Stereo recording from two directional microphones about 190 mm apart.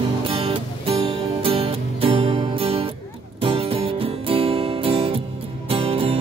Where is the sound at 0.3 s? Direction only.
30° right (ahead or behind).